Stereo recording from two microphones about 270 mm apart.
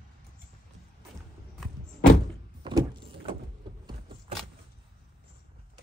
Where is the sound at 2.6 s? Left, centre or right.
Centre.